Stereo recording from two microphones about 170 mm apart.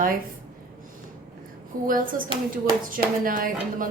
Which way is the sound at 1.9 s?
55° right (ahead or behind).